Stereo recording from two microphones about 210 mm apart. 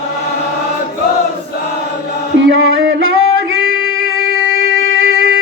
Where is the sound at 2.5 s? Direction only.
75° right (ahead or behind).